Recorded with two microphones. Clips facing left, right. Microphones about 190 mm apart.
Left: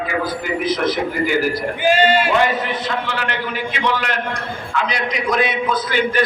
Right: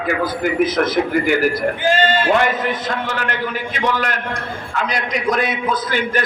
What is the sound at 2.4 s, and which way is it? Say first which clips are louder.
A man's voice: even; 50° right (ahead or behind).